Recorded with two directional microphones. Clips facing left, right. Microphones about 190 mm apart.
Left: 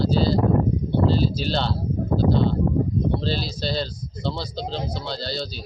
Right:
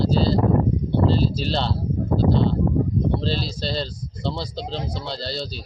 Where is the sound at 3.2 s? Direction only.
Centre (ahead or behind).